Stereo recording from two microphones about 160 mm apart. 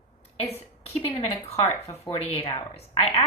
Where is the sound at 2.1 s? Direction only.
35° left (ahead or behind).